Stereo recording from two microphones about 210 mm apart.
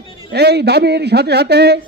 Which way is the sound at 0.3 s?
50° right (ahead or behind).